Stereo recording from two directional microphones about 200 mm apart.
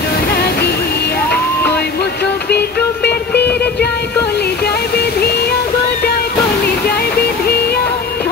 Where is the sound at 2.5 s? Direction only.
55° left (ahead or behind).